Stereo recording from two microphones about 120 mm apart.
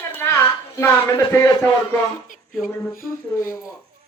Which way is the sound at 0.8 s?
25° left (ahead or behind).